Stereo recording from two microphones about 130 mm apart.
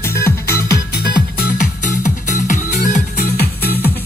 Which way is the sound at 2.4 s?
75° left (ahead or behind).